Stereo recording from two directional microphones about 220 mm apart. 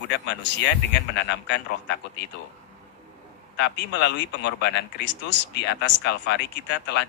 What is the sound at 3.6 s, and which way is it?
Speech, 50° left (ahead or behind).